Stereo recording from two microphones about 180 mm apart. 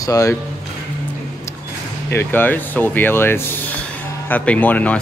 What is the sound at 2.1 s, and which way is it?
Speech, 10° left (ahead or behind).